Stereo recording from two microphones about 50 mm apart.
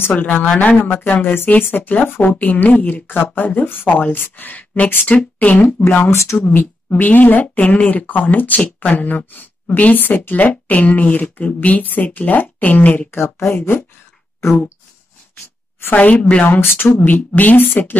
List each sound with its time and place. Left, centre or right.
0.1 s speech: left
2.0 s speech: left
2.3 s speech: left
6.0 s speech: left
6.4 s speech: left
13.1 s speech: left
13.6 s speech: left
16.0 s speech: left
16.4 s speech: left